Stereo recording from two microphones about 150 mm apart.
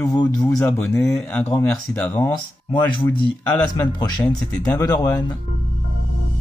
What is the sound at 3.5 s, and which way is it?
Speech, 10° left (ahead or behind).